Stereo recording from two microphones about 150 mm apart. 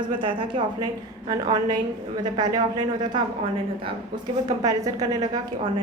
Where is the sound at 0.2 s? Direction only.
35° right (ahead or behind).